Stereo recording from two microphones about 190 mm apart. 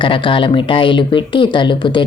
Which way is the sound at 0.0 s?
25° left (ahead or behind).